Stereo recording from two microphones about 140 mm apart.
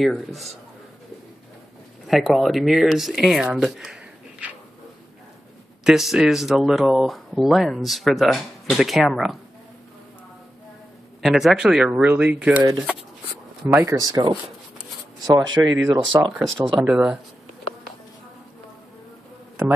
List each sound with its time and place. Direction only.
0.0 s speech: centre (ahead or behind)
2.0 s speech: centre (ahead or behind)
5.9 s speech: centre (ahead or behind)
11.2 s speech: 5° right (ahead or behind)
13.7 s speech: 15° right (ahead or behind)
13.9 s speech: 25° right (ahead or behind)
16.3 s speech: centre (ahead or behind)